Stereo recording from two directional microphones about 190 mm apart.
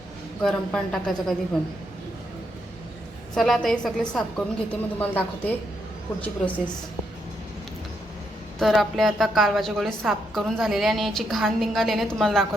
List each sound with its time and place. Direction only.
0.4 s a woman's voice: centre (ahead or behind)
3.3 s a woman's voice: centre (ahead or behind)
8.5 s a woman's voice: centre (ahead or behind)